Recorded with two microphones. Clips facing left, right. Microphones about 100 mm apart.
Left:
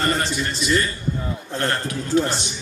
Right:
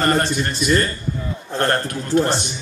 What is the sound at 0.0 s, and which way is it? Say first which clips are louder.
A man's voice: right 4 dB; 55° right (ahead or behind).